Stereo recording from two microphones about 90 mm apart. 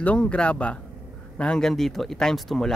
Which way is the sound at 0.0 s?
15° left (ahead or behind).